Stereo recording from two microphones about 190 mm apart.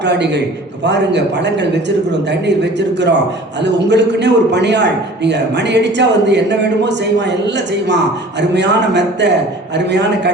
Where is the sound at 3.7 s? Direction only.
65° right (ahead or behind).